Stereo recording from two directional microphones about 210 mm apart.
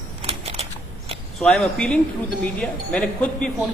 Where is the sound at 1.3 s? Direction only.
Centre (ahead or behind).